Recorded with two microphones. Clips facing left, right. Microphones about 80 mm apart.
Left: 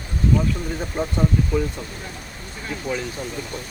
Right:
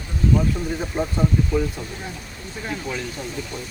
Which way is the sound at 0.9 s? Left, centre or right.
Centre.